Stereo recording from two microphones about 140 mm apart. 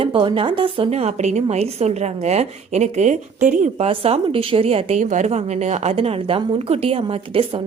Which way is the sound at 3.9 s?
40° right (ahead or behind).